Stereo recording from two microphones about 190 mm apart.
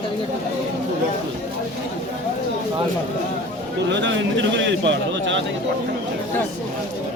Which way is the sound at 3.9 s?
75° right (ahead or behind).